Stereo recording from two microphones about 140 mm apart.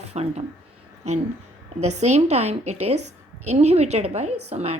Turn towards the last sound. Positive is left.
turn(degrees=-50)  # may be behind; listen again after turning